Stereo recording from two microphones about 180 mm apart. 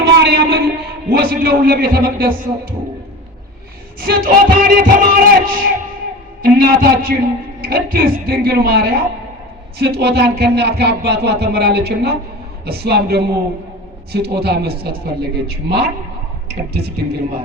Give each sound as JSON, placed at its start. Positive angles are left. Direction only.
{"t": 0.0, "sound": "a sound", "side_deg": -65}
{"t": 4.0, "sound": "a man's voice", "side_deg": -55}
{"t": 6.4, "sound": "a man's voice", "side_deg": -55}